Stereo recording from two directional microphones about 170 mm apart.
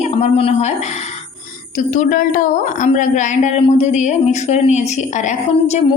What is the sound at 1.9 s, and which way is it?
A woman's voice, 50° left (ahead or behind).